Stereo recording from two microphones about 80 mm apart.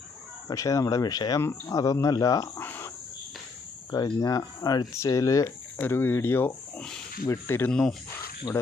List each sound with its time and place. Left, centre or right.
0.4 s speech: left
2.6 s cricket: left
3.9 s speech: left
4.9 s speech: left
5.8 s speech: left
6.7 s speech: centre
7.3 s speech: left
8.5 s speech: left